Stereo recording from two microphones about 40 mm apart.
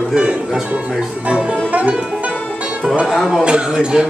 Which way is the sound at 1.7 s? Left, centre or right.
Right.